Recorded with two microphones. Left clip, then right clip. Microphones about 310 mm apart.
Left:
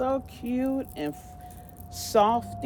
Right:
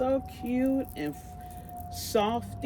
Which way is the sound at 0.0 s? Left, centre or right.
Centre.